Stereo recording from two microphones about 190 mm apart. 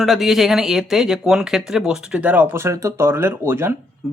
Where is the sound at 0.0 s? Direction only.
Centre (ahead or behind).